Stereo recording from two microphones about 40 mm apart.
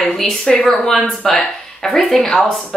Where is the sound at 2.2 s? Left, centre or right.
Centre.